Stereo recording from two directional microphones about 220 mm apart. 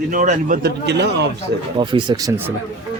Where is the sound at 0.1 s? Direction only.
35° right (ahead or behind); by 1.3 s 50° right (ahead or behind).